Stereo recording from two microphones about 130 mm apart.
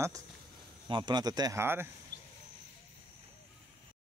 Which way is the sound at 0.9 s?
40° right (ahead or behind).